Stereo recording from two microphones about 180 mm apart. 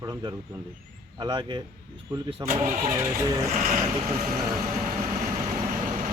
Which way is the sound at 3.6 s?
45° right (ahead or behind).